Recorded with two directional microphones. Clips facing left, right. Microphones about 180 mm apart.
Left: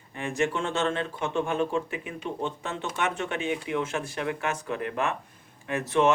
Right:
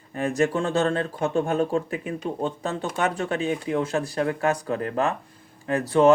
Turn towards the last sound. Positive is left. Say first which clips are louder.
# right 5 dB
turn(degrees=-35)  # may be behind; listen again after turning